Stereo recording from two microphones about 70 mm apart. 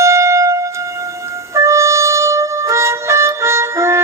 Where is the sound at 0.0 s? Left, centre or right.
Right.